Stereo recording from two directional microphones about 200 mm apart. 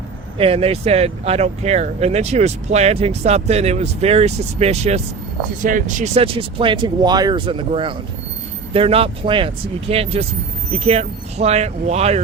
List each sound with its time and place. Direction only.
0.3 s speech: 30° right (ahead or behind)